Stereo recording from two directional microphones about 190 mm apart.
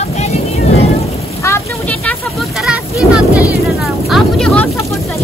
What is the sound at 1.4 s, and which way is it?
Speech, 10° left (ahead or behind).